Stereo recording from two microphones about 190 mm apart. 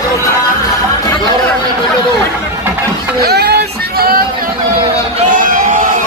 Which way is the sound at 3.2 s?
55° right (ahead or behind).